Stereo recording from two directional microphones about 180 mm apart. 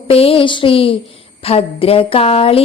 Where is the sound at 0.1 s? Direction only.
30° left (ahead or behind).